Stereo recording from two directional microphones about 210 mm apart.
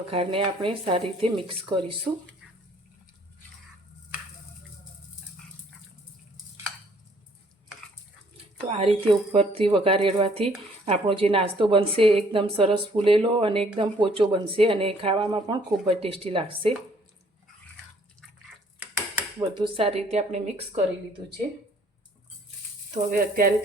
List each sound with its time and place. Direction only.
0.1 s a woman's voice: 25° right (ahead or behind)
8.6 s a woman's voice: 30° right (ahead or behind)
19.4 s a woman's voice: 25° right (ahead or behind)
23.0 s speech: 45° right (ahead or behind)